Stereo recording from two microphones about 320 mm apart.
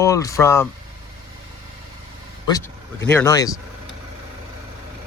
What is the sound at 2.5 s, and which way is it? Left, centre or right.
Speech, centre.